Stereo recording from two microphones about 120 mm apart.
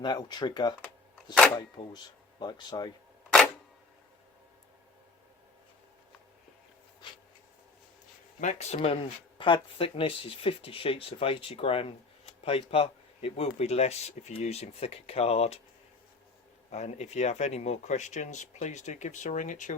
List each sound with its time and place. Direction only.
0.0 s speech: 35° left (ahead or behind)
8.4 s speech: 80° left; by 9.0 s 60° left (ahead or behind)
9.4 s speech: 45° left (ahead or behind)
16.6 s speech: 65° left (ahead or behind); by 19.7 s 90° left